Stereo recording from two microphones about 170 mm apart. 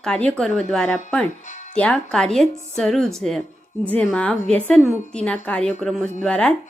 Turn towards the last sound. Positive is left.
turn(degrees=5)  # may be behind; listen again after turning